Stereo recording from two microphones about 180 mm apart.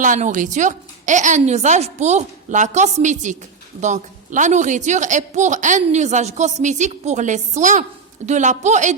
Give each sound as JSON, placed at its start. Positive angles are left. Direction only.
{"t": 0.0, "sound": "a woman's voice", "side_deg": -45}